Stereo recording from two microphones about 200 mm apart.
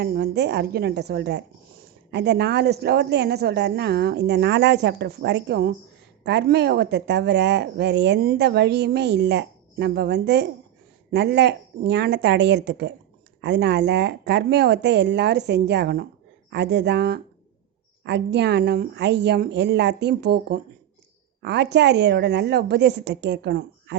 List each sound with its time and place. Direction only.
0.0 s speech: 55° right (ahead or behind)